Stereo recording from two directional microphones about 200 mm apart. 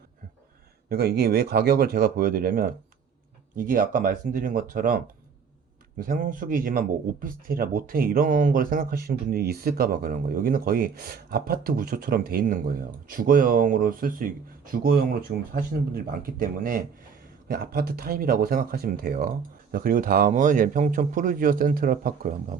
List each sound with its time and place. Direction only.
0.9 s speech: 50° right (ahead or behind)